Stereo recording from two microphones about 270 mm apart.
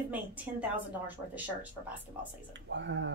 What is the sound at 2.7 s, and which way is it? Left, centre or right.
Speech, right.